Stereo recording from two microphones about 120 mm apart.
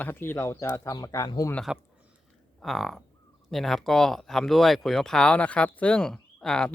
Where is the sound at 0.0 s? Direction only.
20° left (ahead or behind).